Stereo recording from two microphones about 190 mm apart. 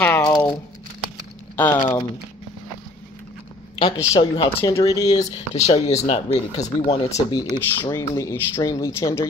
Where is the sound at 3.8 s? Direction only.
20° left (ahead or behind).